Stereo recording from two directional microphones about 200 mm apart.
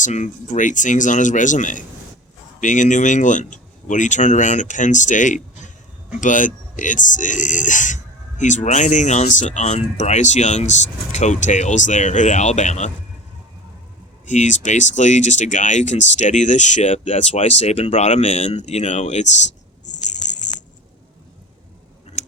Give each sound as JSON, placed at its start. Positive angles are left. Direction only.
{"t": 0.0, "sound": "speech", "side_deg": 40}
{"t": 14.3, "sound": "speech", "side_deg": 35}